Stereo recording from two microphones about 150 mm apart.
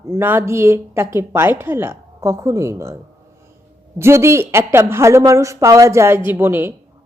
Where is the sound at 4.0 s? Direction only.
15° right (ahead or behind).